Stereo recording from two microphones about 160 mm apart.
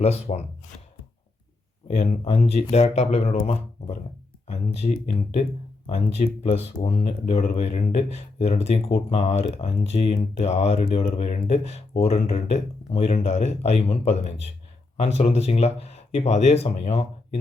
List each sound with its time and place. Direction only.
0.0 s speech: 40° left (ahead or behind)
2.0 s speech: 45° left (ahead or behind)